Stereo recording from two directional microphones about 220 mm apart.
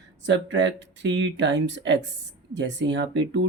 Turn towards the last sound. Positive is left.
turn(degrees=-55)  # may be behind; listen again after turning